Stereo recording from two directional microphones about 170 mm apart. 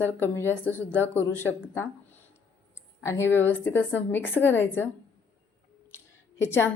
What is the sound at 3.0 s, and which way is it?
A woman's voice, 15° left (ahead or behind).